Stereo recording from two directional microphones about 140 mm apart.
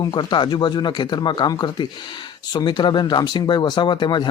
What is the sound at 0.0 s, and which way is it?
Speech, 30° left (ahead or behind).